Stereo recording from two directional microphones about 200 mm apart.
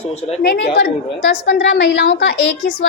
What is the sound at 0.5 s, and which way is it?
A woman's voice, 55° left (ahead or behind).